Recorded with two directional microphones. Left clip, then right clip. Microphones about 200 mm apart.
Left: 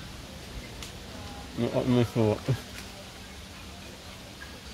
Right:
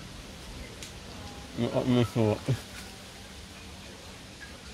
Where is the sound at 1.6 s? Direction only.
5° right (ahead or behind).